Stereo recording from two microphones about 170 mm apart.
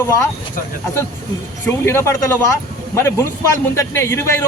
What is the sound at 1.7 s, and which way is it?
A man's voice, 15° left (ahead or behind).